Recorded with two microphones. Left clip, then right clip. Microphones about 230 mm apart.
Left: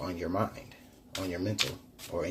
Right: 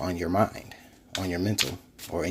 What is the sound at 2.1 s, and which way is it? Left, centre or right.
Speech, right.